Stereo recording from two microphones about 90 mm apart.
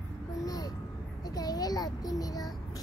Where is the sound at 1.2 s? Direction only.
45° left (ahead or behind).